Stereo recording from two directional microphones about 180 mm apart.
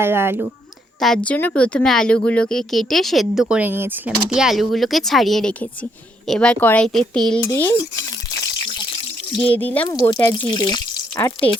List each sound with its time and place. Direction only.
0.0 s speech: 15° right (ahead or behind)
1.0 s speech: 5° left (ahead or behind)
7.4 s speech: 15° left (ahead or behind)
9.4 s speech: 10° left (ahead or behind)
9.8 s speech: 25° left (ahead or behind)